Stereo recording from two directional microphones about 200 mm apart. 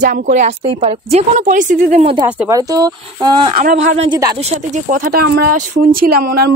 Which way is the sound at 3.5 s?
45° right (ahead or behind).